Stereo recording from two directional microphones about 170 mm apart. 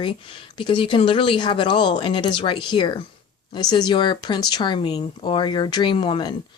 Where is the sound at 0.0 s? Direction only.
30° left (ahead or behind).